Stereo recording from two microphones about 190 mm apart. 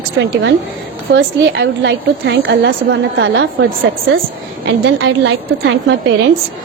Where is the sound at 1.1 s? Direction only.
70° right (ahead or behind).